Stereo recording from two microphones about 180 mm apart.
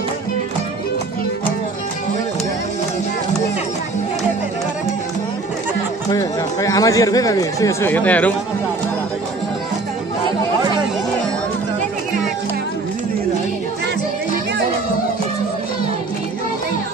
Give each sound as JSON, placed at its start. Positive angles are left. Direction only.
{"t": 6.0, "sound": "speech", "side_deg": 20}